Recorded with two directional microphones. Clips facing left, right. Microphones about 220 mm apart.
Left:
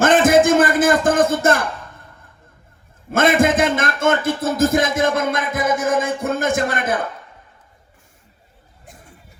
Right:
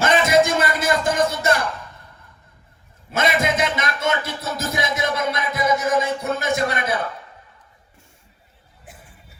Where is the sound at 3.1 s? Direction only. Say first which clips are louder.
Left 6 dB; 50° left (ahead or behind).